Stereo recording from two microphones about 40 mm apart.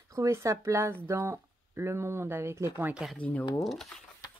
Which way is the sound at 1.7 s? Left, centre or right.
Right.